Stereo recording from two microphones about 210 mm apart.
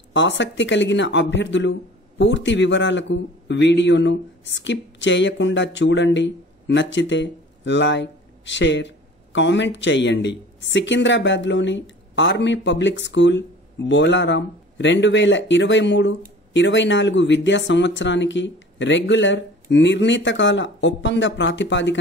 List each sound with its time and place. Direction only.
0.1 s speech: 60° left (ahead or behind)